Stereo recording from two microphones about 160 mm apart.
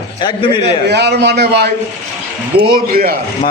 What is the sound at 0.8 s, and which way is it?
Speech, 90° right.